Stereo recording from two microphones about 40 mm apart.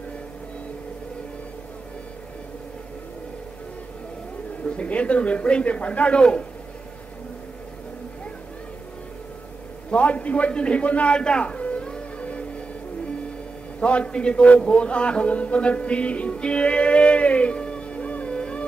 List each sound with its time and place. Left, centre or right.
4.6 s speech: left
9.8 s speech: left
11.1 s speech: left
11.4 s music: left
13.7 s a man's voice: left